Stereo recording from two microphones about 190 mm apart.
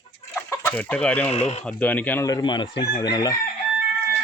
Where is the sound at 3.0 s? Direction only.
20° left (ahead or behind).